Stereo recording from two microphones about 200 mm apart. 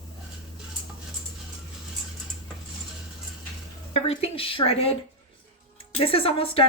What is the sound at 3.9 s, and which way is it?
A woman's voice, 30° left (ahead or behind).